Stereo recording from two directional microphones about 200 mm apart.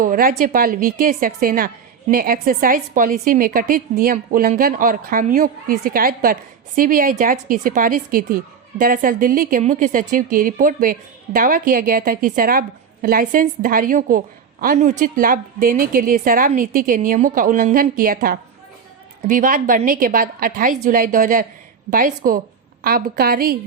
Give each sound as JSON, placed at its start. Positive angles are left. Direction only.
{"t": 0.0, "sound": "a woman's voice", "side_deg": -45}